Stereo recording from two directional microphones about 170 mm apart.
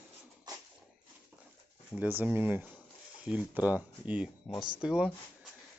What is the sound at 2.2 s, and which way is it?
Speech, 10° right (ahead or behind).